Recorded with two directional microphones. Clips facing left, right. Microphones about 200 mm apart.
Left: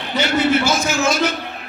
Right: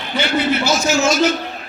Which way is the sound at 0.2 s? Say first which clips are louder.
Left 1 dB; 45° left (ahead or behind).